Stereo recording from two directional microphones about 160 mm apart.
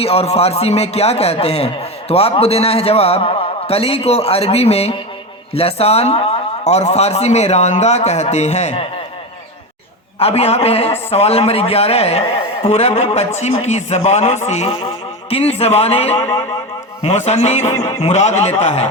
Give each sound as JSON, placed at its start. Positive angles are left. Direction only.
{"t": 0.0, "sound": "a man's voice", "side_deg": 40}
{"t": 10.2, "sound": "a man's voice", "side_deg": 40}